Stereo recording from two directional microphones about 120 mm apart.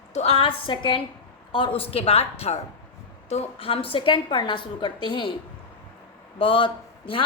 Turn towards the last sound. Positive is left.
turn(degrees=45)  # may be behind; listen again after turning